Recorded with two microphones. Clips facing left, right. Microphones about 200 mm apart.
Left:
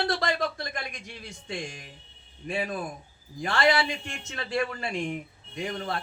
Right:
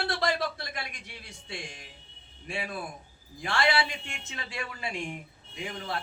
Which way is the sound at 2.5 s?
40° left (ahead or behind).